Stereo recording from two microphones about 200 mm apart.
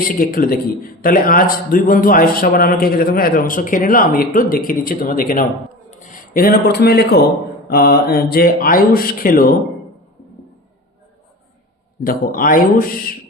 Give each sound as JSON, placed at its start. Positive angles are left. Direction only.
{"t": 0.1, "sound": "a man's voice", "side_deg": 45}
{"t": 12.0, "sound": "a man's voice", "side_deg": 45}